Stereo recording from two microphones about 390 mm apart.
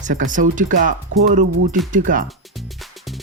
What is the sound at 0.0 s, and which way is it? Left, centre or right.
Speech, centre.